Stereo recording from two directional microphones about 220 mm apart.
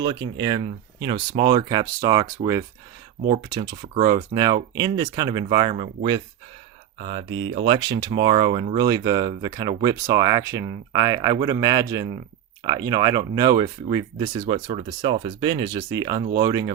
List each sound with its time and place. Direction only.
0.0 s speech: 20° right (ahead or behind)
14.5 s speech: 30° right (ahead or behind)